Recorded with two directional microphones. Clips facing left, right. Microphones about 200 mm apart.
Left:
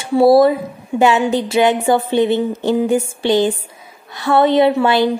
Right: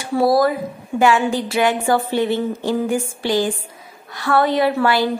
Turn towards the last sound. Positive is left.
turn(degrees=20)  # may be behind; listen again after turning